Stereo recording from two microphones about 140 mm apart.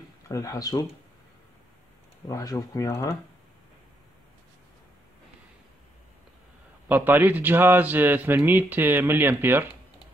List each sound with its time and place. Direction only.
0.3 s speech: 25° left (ahead or behind)
2.2 s speech: 25° left (ahead or behind)
6.9 s a man's voice: 15° right (ahead or behind)